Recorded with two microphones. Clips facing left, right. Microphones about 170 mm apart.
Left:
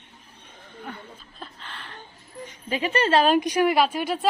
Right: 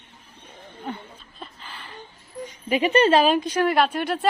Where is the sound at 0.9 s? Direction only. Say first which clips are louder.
Right 6 dB; 20° right (ahead or behind).